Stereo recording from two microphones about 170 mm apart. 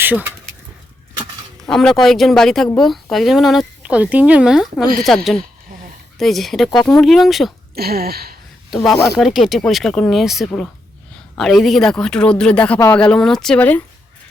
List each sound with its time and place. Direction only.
0.0 s speech: 10° right (ahead or behind)
1.6 s speech: 5° left (ahead or behind)
7.8 s speech: 65° right (ahead or behind)
8.7 s speech: centre (ahead or behind)